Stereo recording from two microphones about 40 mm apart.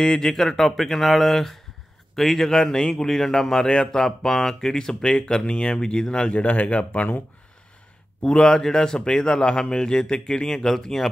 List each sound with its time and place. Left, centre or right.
0.0 s a man's voice: centre
6.3 s speech: left
8.2 s a man's voice: centre